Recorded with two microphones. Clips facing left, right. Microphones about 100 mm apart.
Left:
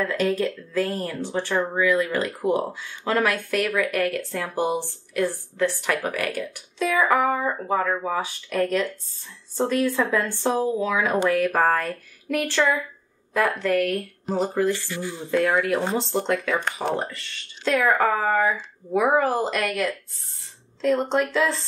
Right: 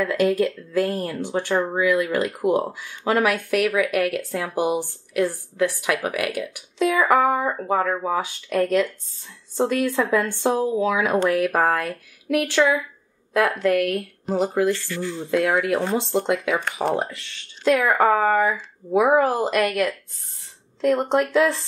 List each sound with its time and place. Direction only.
0.0 s speech: 10° right (ahead or behind)
14.7 s speech: 15° left (ahead or behind)
16.0 s speech: 15° right (ahead or behind)
16.6 s speech: centre (ahead or behind)
21.1 s speech: 10° right (ahead or behind)